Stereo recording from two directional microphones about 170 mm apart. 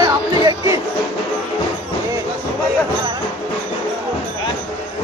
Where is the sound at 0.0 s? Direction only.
20° right (ahead or behind).